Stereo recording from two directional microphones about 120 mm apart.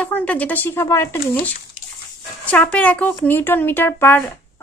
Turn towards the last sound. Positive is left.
turn(degrees=15)  # may be behind; listen again after turning